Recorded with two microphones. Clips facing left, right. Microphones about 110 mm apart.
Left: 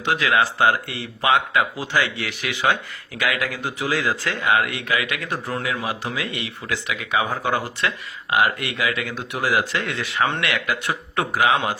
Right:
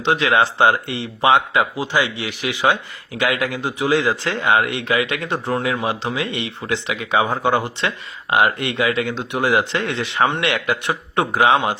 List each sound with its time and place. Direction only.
0.0 s speech: 25° right (ahead or behind)